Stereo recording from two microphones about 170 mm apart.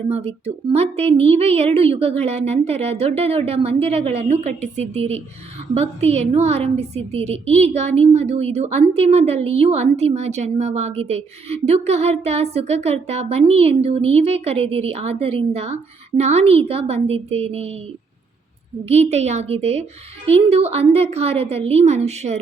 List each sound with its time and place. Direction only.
0.1 s a woman's voice: 35° right (ahead or behind)
18.9 s a woman's voice: 40° right (ahead or behind)